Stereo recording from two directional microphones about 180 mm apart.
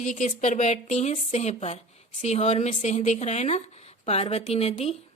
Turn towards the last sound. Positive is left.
turn(degrees=35)  # may be behind; listen again after turning